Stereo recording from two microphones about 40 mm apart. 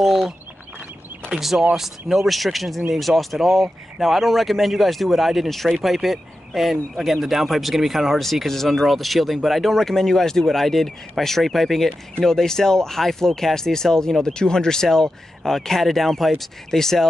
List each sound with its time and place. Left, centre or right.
0.0 s speech: centre
1.8 s speech: centre
12.2 s speech: centre